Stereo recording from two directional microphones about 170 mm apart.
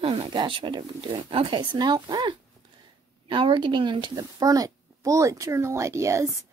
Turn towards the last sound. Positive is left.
turn(degrees=-15)  # may be behind; listen again after turning